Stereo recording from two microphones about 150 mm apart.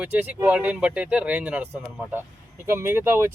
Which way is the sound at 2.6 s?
20° right (ahead or behind).